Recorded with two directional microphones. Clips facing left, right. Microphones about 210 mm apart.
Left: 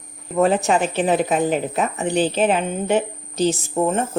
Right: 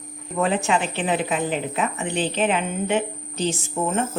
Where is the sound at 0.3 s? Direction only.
40° left (ahead or behind).